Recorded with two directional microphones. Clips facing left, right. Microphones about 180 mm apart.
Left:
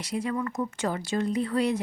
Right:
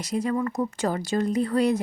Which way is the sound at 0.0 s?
40° right (ahead or behind).